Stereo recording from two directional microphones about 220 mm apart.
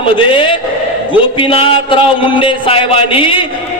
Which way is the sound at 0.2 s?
25° left (ahead or behind).